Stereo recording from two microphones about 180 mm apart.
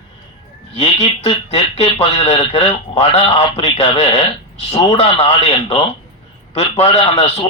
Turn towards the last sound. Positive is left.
turn(degrees=35)  # may be behind; listen again after turning